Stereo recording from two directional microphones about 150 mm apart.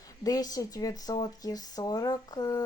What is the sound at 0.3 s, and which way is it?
A woman's voice, 25° left (ahead or behind).